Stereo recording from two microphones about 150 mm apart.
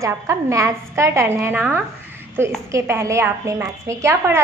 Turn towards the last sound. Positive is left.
turn(degrees=-20)  # may be behind; listen again after turning